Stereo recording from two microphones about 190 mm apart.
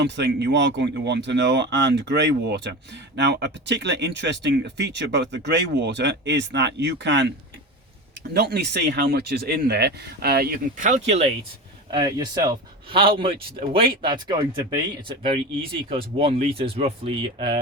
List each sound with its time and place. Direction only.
0.0 s speech: 65° right (ahead or behind)
8.3 s speech: 55° right (ahead or behind); by 11.3 s 35° right (ahead or behind)
11.9 s speech: 20° right (ahead or behind)